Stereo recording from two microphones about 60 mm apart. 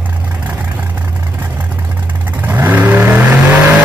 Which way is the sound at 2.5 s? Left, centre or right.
Right.